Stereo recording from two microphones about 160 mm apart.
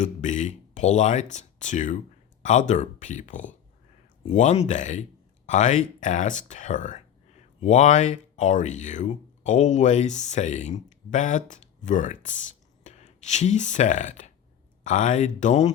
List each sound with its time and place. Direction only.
0.0 s speech: 50° left (ahead or behind)